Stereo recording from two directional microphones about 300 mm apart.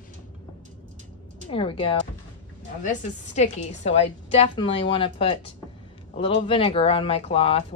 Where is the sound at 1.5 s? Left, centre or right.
Centre.